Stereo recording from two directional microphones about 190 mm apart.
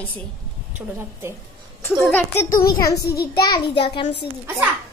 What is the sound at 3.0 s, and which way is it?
Speech, 55° left (ahead or behind).